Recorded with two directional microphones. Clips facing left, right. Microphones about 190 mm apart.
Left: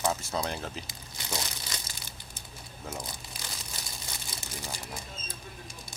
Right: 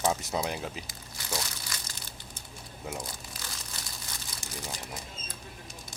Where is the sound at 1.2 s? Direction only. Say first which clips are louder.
Even; 20° left (ahead or behind).